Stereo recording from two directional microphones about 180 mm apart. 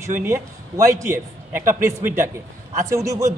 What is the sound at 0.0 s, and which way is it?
A man's voice, 15° right (ahead or behind).